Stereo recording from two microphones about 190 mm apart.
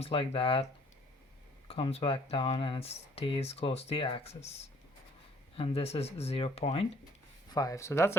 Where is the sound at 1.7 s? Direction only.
30° left (ahead or behind).